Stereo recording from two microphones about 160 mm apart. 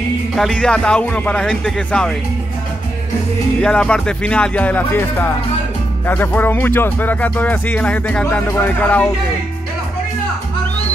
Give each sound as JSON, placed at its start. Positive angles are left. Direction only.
{"t": 0.4, "sound": "speech", "side_deg": 5}
{"t": 3.6, "sound": "music", "side_deg": 5}